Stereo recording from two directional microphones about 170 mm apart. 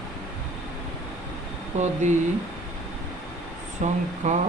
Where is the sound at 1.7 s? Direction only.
40° right (ahead or behind).